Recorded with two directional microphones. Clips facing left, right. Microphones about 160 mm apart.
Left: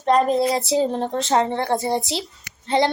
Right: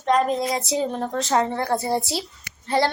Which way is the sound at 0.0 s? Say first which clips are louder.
Left 3 dB; 35° left (ahead or behind).